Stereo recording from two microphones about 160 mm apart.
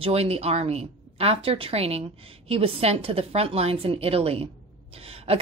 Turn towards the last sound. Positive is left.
turn(degrees=-35)  # may be behind; listen again after turning